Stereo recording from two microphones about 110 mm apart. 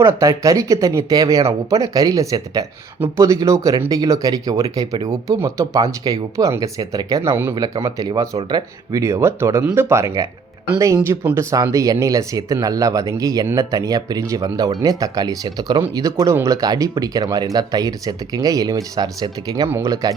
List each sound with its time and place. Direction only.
0.0 s speech: 30° right (ahead or behind)